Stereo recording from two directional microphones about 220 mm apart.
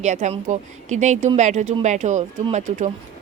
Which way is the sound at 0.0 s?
30° right (ahead or behind).